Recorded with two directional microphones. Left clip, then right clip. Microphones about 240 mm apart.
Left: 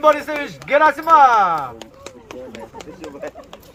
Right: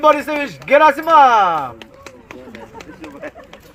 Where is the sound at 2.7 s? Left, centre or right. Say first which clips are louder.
Left 1 dB; left.